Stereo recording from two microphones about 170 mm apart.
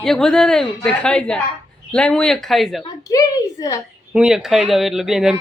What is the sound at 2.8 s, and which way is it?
A child's voice, 20° left (ahead or behind).